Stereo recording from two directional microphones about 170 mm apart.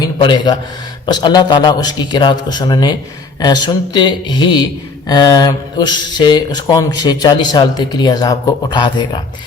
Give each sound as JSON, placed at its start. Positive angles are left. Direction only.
{"t": 0.0, "sound": "speech", "side_deg": 25}